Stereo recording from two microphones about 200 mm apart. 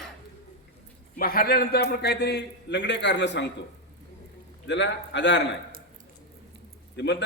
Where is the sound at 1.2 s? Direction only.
45° left (ahead or behind).